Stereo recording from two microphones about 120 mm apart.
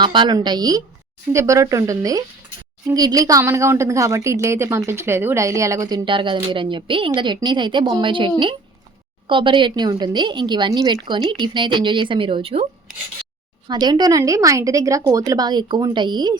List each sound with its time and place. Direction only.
0.0 s a woman's voice: 40° right (ahead or behind)
6.1 s a woman's voice: 40° right (ahead or behind)
13.7 s a woman's voice: 35° right (ahead or behind)